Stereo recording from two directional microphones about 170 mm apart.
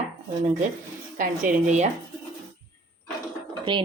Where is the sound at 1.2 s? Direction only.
45° right (ahead or behind).